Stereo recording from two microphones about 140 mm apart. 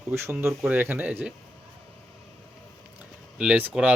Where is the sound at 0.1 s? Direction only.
20° right (ahead or behind).